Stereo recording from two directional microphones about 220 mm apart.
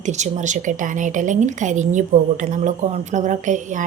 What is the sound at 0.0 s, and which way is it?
A woman's voice, 35° right (ahead or behind).